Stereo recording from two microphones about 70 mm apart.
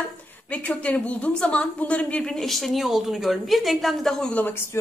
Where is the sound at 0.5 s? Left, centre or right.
Centre.